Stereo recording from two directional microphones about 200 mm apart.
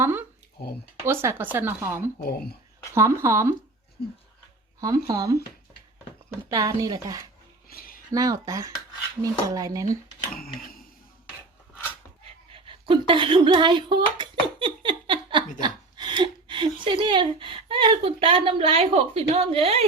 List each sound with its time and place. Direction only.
0.0 s speech: 10° right (ahead or behind)
4.8 s speech: 20° right (ahead or behind)
6.5 s speech: 20° right (ahead or behind)
7.7 s a sound: 50° left (ahead or behind)
8.1 s speech: 15° right (ahead or behind)
10.3 s a sound: 45° left (ahead or behind)
12.5 s speech: 25° right (ahead or behind)
15.6 s a sound: 20° right (ahead or behind)
16.8 s a woman's voice: 25° right (ahead or behind)